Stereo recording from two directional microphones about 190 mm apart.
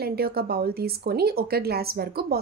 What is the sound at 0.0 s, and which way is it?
Speech, 55° right (ahead or behind).